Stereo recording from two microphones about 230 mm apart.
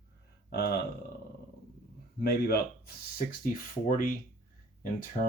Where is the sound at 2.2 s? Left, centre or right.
Left.